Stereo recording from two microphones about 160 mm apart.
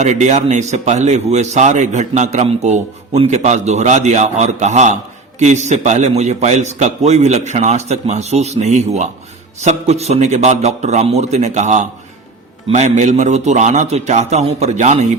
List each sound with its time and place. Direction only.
0.0 s speech: 45° right (ahead or behind)